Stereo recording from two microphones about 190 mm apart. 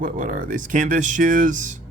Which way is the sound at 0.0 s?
45° right (ahead or behind).